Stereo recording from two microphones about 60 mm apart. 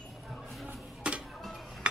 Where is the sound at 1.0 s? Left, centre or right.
Centre.